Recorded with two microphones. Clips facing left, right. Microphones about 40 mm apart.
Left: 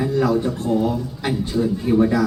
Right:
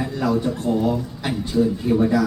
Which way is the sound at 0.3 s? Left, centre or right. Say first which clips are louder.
Left 1 dB; centre.